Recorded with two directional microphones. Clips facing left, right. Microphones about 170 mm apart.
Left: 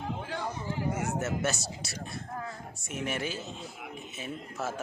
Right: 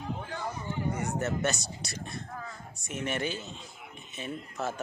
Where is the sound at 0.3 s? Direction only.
80° left.